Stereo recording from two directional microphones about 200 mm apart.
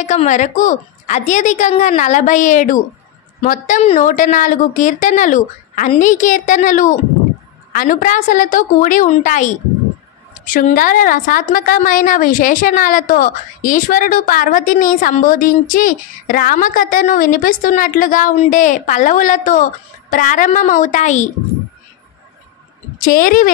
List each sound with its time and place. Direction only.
0.0 s a woman's voice: 35° left (ahead or behind)
23.0 s a woman's voice: 45° left (ahead or behind)